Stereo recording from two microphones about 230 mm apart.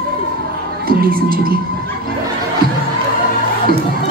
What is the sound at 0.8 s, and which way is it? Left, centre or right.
Music, right.